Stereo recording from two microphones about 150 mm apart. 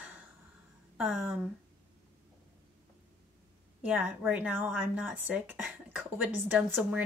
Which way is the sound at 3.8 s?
5° right (ahead or behind).